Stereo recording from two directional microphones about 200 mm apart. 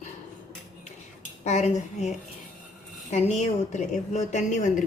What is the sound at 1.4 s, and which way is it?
Speech, 35° left (ahead or behind).